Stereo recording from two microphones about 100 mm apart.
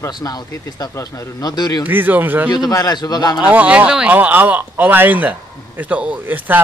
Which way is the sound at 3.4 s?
15° right (ahead or behind).